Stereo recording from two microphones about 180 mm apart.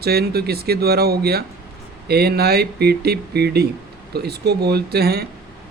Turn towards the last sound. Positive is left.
turn(degrees=-60)  # may be behind; listen again after turning